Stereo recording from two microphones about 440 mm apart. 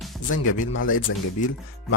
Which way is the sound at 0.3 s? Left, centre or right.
Left.